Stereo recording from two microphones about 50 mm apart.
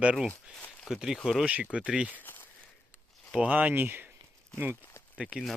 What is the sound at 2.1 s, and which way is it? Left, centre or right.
Speech, left.